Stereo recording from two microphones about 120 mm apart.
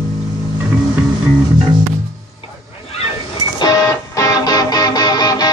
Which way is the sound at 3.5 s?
35° left (ahead or behind).